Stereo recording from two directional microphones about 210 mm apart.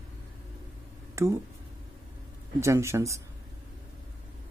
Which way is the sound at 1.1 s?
15° right (ahead or behind).